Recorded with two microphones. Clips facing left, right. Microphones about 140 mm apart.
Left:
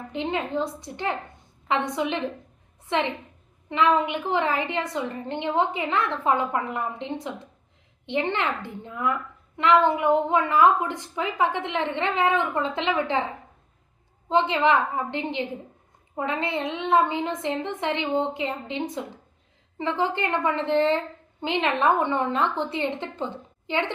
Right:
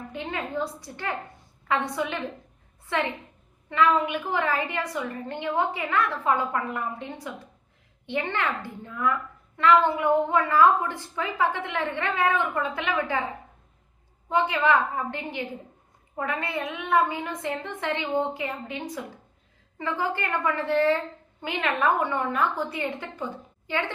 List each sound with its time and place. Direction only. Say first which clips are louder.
0.1 s a woman's voice: left 5 dB; 20° left (ahead or behind)
14.3 s a woman's voice: left 2 dB; 25° left (ahead or behind)